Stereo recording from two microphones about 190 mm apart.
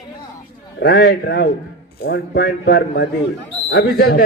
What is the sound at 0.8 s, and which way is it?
A man's voice, 60° left (ahead or behind).